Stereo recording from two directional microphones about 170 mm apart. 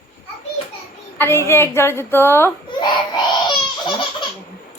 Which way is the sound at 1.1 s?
15° left (ahead or behind).